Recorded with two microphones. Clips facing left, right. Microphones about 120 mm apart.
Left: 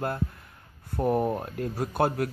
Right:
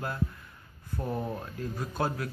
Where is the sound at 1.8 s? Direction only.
60° left (ahead or behind).